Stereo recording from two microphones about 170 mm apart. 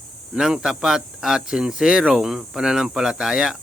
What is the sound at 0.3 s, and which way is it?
Speech, 5° right (ahead or behind).